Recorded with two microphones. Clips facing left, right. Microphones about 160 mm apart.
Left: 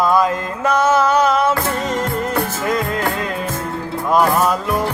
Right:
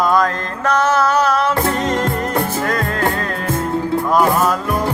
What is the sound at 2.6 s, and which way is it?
Music, 10° left (ahead or behind).